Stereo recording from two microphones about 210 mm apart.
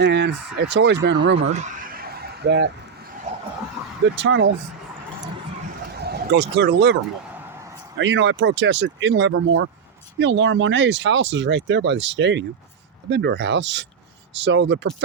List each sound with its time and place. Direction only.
0.0 s speech: 55° right (ahead or behind)
1.5 s a sound: 35° right (ahead or behind); by 2.6 s 55° right (ahead or behind)
4.1 s speech: 60° right (ahead or behind)
6.0 s speech: 50° right (ahead or behind)
7.9 s speech: 60° right (ahead or behind)